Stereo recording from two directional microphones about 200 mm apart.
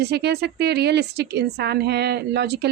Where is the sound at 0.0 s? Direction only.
55° right (ahead or behind).